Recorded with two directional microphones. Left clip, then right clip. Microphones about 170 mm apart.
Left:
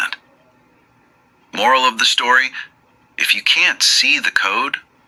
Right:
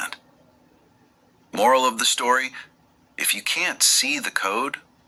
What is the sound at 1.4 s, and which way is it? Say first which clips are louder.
Speech: left 4 dB; 15° right (ahead or behind).